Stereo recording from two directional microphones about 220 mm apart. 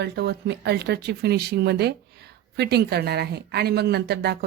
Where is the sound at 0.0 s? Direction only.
50° right (ahead or behind).